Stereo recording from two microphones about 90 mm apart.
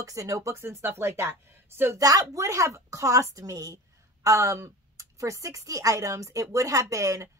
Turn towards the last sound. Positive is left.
turn(degrees=-35)  # may be behind; listen again after turning